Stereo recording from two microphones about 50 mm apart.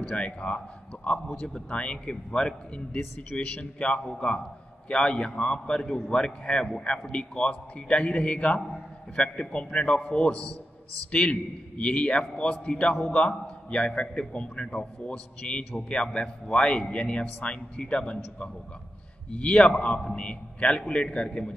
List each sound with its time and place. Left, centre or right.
0.1 s a man's voice: left